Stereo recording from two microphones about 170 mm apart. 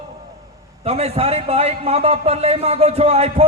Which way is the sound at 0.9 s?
35° right (ahead or behind).